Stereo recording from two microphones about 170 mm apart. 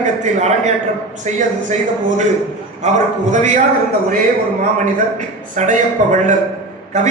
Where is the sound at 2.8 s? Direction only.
45° right (ahead or behind).